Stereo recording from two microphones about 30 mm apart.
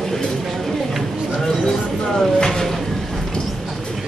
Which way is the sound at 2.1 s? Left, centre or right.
Centre.